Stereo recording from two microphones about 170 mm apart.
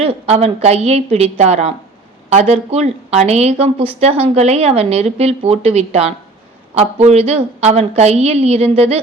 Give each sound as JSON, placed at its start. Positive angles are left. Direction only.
{"t": 0.0, "sound": "a woman's voice", "side_deg": -35}